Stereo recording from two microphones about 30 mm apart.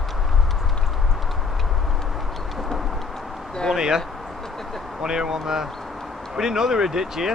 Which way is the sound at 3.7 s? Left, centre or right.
Right.